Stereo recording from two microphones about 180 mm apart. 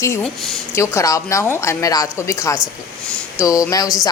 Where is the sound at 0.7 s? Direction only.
15° left (ahead or behind).